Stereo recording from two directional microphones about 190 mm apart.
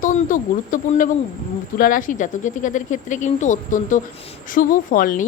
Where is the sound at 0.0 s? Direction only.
45° left (ahead or behind).